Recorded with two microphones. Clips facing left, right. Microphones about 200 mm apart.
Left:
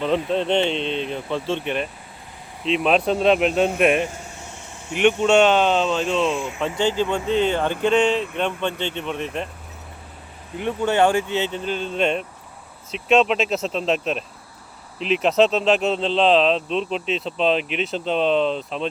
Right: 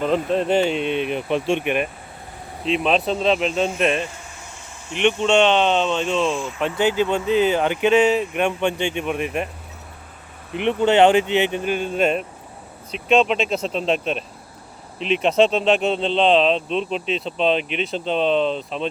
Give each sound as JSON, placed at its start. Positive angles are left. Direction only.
{"t": 0.3, "sound": "speech", "side_deg": -5}
{"t": 2.6, "sound": "speech", "side_deg": 0}
{"t": 10.6, "sound": "speech", "side_deg": -20}